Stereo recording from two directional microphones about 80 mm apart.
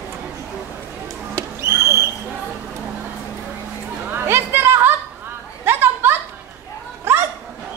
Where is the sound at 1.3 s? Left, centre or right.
Right.